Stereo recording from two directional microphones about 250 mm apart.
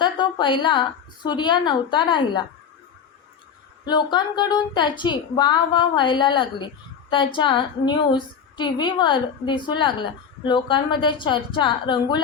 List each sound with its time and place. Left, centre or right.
0.0 s a woman's voice: centre
3.8 s a woman's voice: centre